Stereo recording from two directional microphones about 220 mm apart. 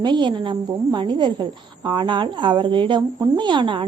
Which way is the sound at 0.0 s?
20° right (ahead or behind).